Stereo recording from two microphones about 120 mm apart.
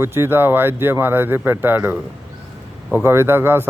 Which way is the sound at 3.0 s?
20° right (ahead or behind).